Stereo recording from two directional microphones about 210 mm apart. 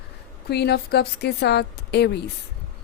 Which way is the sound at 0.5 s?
50° left (ahead or behind).